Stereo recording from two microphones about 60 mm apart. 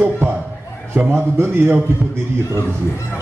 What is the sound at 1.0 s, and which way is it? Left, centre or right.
Speech, right.